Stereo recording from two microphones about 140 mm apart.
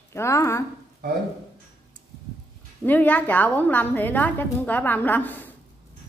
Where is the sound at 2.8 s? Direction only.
10° left (ahead or behind).